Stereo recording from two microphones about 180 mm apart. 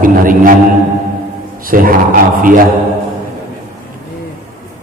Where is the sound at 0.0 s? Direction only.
50° right (ahead or behind).